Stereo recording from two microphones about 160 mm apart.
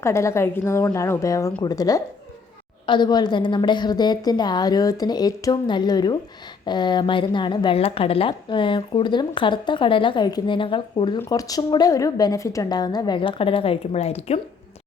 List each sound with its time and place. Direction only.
0.0 s a woman's voice: 15° left (ahead or behind); by 14.3 s 40° left (ahead or behind)